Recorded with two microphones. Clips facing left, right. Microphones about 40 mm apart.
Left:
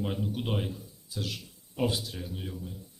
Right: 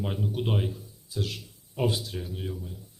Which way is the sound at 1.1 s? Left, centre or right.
Centre.